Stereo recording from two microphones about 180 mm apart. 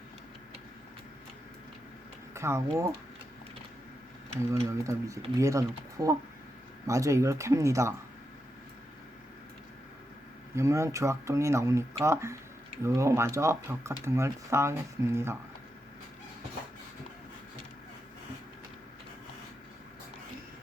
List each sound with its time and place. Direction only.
2.3 s speech: 15° right (ahead or behind)
4.6 s speech: 15° right (ahead or behind)
10.5 s speech: 15° right (ahead or behind)